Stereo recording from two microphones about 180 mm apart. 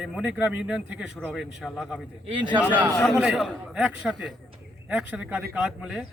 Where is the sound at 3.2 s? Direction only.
Centre (ahead or behind).